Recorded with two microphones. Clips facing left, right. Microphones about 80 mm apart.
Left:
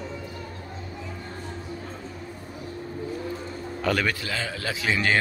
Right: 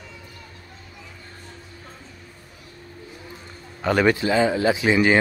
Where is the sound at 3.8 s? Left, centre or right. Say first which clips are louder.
Right 7 dB; right.